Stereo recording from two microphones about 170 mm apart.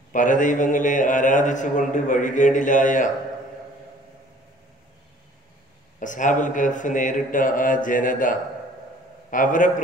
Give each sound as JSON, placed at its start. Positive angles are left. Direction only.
{"t": 0.1, "sound": "a man's voice", "side_deg": 50}
{"t": 5.9, "sound": "a man's voice", "side_deg": 50}